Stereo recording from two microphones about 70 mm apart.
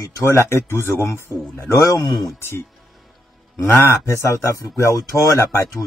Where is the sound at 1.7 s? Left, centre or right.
Left.